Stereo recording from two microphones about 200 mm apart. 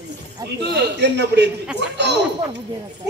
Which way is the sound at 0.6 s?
55° right (ahead or behind).